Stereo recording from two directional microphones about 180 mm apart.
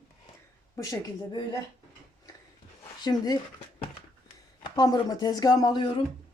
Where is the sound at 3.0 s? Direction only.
25° left (ahead or behind).